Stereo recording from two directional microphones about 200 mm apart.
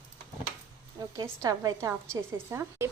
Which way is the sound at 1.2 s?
20° right (ahead or behind).